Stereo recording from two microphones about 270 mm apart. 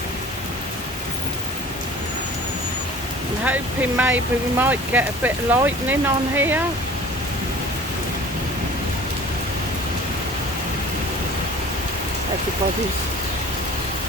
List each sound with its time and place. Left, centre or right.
3.4 s speech: centre